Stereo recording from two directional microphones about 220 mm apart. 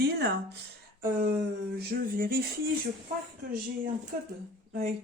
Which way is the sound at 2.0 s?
40° right (ahead or behind).